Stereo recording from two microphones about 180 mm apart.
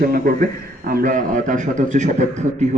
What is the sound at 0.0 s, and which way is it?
A man's voice, 55° right (ahead or behind).